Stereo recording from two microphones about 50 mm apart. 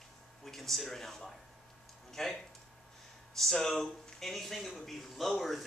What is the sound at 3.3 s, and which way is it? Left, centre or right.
Speech, centre.